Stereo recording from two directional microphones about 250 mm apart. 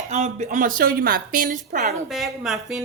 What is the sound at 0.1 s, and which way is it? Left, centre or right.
A woman's voice, right.